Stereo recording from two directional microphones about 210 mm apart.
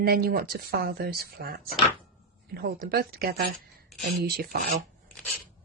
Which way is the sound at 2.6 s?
45° right (ahead or behind).